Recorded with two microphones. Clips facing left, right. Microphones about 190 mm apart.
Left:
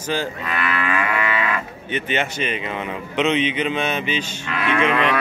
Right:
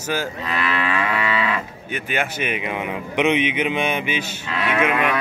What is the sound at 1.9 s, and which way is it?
A man's voice, 10° right (ahead or behind).